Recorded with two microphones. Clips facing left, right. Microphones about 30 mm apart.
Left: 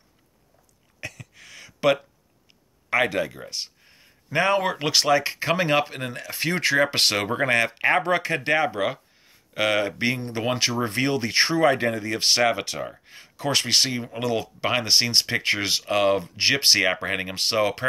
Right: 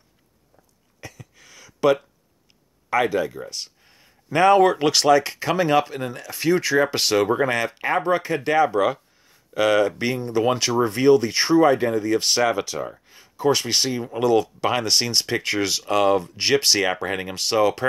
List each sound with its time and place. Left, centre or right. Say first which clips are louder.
1.0 s a sound: left 4 dB; left
2.9 s speech: right 1 dB; left
3.3 s speech: right 1 dB; left
3.8 s speech: even; centre
5.1 s speech: right 3 dB; left
8.0 s speech: right 2 dB; left
8.5 s speech: right 4 dB; left
8.7 s speech: right 5 dB; centre
10.9 s speech: right 8 dB; left
13.0 s a sound: left 4 dB; left
13.4 s speech: right 2 dB; left
14.3 s speech: right 3 dB; left